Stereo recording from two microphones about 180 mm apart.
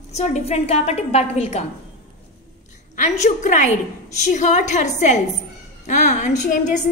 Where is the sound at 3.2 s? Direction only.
45° left (ahead or behind).